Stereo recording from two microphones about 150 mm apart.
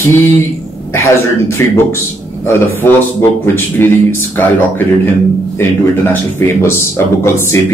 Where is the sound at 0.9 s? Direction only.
15° left (ahead or behind).